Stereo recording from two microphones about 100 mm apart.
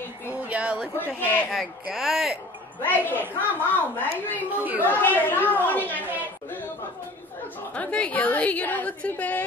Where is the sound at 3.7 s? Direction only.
20° left (ahead or behind).